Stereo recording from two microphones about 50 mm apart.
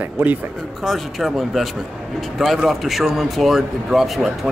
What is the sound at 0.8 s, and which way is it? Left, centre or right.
Speech, centre.